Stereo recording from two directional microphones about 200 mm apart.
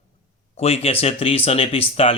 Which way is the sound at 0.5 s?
30° left (ahead or behind).